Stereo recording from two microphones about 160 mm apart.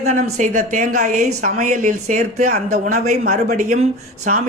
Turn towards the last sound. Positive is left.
turn(degrees=-50)  # may be behind; listen again after turning